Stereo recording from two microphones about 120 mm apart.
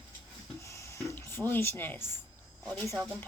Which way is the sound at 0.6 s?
25° left (ahead or behind).